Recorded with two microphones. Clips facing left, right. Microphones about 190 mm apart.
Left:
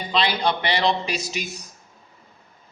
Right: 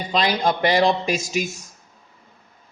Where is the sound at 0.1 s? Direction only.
45° right (ahead or behind).